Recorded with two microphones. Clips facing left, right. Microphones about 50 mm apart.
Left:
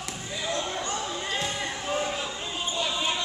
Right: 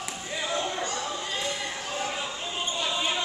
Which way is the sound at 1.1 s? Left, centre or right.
Centre.